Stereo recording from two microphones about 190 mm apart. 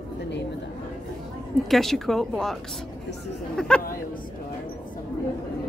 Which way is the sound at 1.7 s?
Centre (ahead or behind).